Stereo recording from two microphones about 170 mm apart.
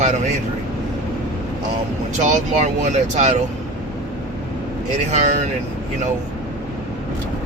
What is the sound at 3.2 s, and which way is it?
Speech, 45° right (ahead or behind).